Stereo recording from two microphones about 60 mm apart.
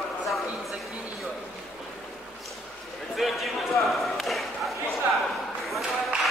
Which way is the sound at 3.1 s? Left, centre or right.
Centre.